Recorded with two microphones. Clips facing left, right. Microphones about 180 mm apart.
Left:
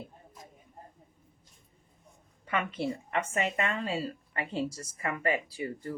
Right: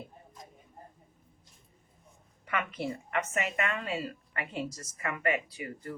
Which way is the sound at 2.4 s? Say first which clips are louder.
Left 2 dB; 30° left (ahead or behind).